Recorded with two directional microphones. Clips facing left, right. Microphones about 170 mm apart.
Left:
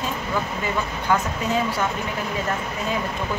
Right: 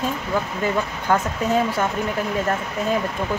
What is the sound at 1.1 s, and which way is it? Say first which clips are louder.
Speech: right 2 dB; 50° right (ahead or behind).